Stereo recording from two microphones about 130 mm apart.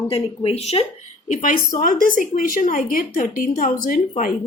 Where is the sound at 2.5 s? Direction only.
80° left.